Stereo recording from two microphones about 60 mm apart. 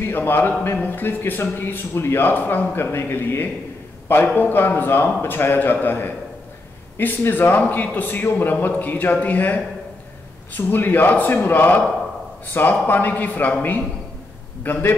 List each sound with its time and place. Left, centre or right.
0.0 s a man's voice: left